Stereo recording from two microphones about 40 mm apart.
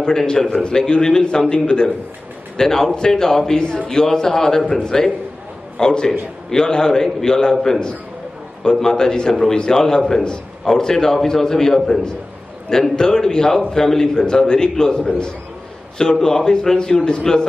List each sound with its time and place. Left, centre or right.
0.0 s a man's voice: centre
8.6 s a man's voice: centre
9.3 s a man's voice: centre